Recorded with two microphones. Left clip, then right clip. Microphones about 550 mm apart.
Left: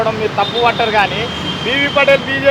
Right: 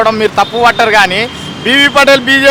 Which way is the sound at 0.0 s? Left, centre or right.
Right.